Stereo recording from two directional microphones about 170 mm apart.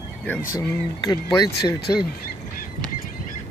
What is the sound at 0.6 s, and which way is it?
Speech, 20° left (ahead or behind).